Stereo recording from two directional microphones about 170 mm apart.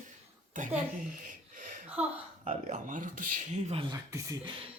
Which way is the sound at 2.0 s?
5° right (ahead or behind).